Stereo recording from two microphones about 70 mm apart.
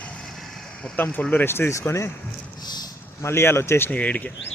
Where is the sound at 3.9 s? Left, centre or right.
Left.